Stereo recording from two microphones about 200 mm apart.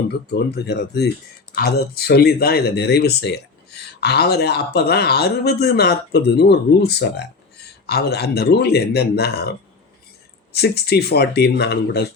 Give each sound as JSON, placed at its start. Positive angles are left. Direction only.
{"t": 0.1, "sound": "speech", "side_deg": 55}